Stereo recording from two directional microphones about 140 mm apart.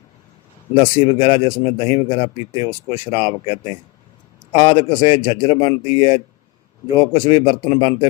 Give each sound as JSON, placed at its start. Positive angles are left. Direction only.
{"t": 0.7, "sound": "a man's voice", "side_deg": 45}